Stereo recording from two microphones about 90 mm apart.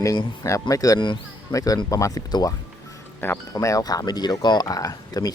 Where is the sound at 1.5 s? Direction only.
40° left (ahead or behind).